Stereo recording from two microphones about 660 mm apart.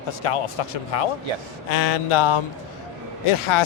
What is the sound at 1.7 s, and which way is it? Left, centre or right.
Speech, left.